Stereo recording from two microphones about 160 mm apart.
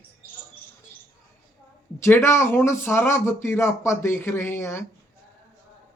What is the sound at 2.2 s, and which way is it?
Speech, 15° left (ahead or behind).